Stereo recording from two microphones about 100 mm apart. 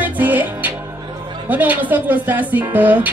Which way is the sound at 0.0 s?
15° right (ahead or behind).